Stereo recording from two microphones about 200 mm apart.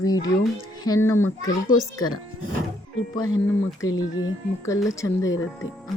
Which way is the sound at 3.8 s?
20° left (ahead or behind).